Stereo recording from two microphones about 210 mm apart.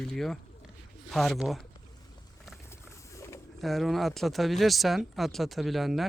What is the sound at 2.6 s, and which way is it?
Boat, 15° left (ahead or behind).